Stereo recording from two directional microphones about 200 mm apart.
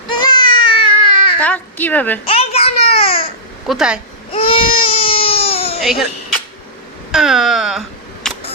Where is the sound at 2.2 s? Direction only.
30° left (ahead or behind).